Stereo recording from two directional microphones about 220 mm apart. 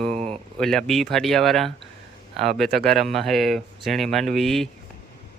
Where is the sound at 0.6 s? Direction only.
Centre (ahead or behind).